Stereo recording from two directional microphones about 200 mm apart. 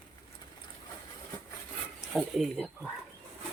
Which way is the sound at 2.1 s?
5° left (ahead or behind).